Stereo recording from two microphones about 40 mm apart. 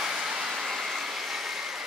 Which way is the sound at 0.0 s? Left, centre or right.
Centre.